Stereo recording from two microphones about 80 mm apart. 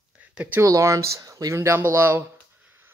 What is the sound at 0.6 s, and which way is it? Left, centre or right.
Speech, right.